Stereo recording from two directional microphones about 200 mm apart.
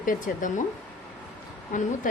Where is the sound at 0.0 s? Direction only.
40° left (ahead or behind).